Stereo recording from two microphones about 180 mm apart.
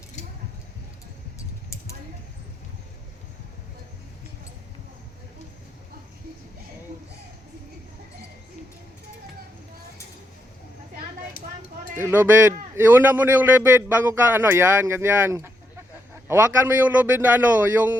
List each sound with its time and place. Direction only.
11.9 s a man's voice: 10° right (ahead or behind)